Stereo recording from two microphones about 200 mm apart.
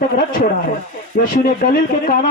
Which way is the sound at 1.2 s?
50° left (ahead or behind).